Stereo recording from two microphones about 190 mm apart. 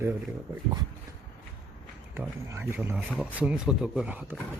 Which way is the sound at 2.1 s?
10° right (ahead or behind).